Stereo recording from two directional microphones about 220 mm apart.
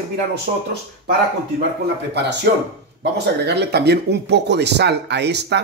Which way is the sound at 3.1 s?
50° right (ahead or behind).